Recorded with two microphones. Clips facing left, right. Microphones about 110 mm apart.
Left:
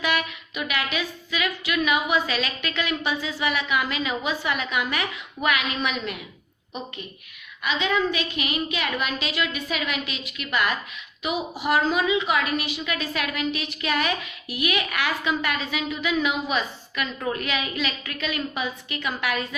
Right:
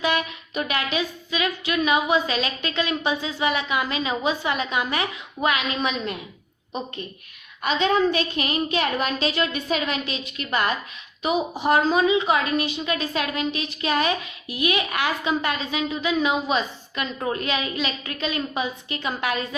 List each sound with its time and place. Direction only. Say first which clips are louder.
0.0 s speech: right 2 dB; 25° right (ahead or behind)
7.6 s a woman's voice: right 4 dB; 40° right (ahead or behind)